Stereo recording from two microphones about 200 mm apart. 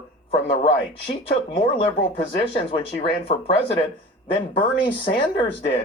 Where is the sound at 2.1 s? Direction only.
25° left (ahead or behind).